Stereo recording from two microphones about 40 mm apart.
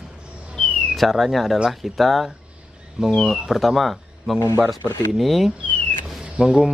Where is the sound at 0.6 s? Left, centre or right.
Centre.